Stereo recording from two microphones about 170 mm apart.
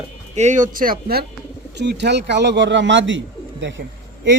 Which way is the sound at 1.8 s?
85° right.